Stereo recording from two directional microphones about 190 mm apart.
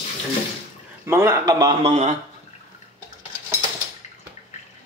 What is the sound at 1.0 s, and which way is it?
Speech, 15° right (ahead or behind).